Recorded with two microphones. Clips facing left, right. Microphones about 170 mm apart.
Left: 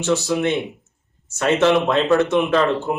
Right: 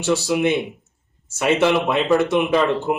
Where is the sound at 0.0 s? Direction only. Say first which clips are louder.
Right 1 dB; 10° right (ahead or behind).